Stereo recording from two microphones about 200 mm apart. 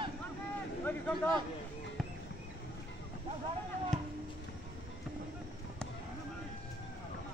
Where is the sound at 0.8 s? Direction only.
10° left (ahead or behind).